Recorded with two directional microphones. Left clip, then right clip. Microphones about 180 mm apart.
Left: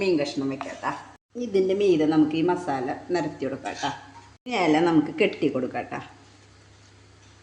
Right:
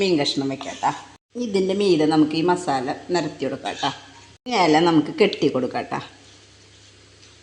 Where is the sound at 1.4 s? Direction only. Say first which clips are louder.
Right 1 dB; 35° right (ahead or behind).